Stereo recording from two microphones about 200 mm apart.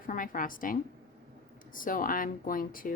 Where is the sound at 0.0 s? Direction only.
45° left (ahead or behind).